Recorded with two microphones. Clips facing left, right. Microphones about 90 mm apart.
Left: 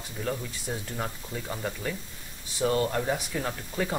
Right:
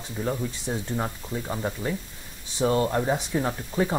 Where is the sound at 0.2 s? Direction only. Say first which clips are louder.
Right 4 dB; 20° right (ahead or behind).